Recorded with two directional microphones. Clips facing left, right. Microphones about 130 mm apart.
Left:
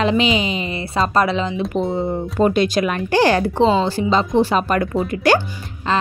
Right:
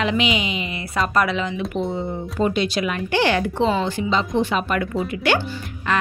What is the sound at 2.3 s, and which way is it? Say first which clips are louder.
Speech: left 5 dB; 50° left (ahead or behind).